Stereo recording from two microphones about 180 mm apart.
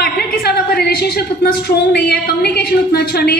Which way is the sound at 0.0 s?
60° left (ahead or behind).